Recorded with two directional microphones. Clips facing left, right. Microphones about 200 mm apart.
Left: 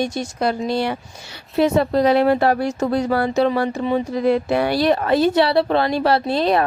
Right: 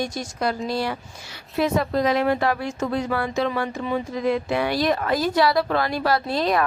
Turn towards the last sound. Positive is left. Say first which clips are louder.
# left 4 dB
turn(degrees=30)  # may be behind; listen again after turning